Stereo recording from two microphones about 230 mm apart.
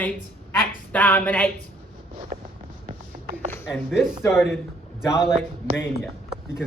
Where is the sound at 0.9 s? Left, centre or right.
Centre.